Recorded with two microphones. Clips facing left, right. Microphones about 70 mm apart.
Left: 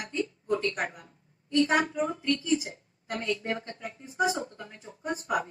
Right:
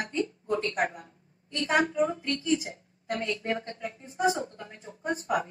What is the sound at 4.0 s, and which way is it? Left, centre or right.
A woman's voice, right.